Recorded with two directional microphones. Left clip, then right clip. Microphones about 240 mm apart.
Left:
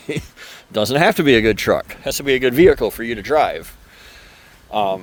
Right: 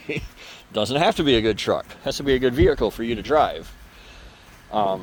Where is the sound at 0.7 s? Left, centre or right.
Left.